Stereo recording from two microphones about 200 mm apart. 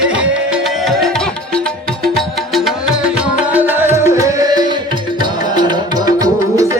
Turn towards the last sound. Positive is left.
turn(degrees=-15)  # may be behind; listen again after turning